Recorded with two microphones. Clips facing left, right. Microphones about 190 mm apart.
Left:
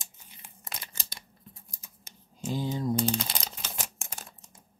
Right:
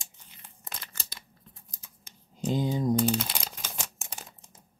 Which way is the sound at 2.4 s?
15° right (ahead or behind).